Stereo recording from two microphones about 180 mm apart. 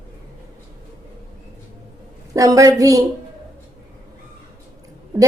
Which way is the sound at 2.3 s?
20° right (ahead or behind).